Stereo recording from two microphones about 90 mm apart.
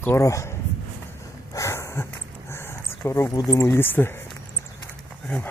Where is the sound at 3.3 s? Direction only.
40° left (ahead or behind); by 4.2 s 25° left (ahead or behind).